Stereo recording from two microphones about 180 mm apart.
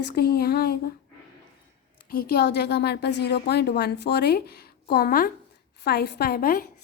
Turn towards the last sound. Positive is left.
turn(degrees=55)  # may be behind; listen again after turning